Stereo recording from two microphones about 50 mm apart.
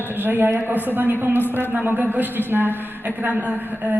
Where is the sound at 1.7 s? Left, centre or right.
Right.